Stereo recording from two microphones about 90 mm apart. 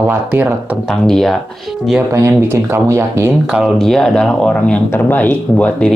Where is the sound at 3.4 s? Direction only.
5° right (ahead or behind).